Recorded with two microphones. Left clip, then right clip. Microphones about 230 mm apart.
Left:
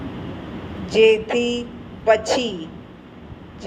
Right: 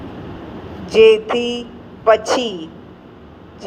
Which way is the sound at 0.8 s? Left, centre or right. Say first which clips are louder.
Right 5 dB; right.